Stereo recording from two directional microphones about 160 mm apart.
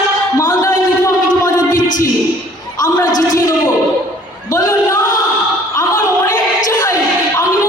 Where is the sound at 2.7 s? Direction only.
20° left (ahead or behind).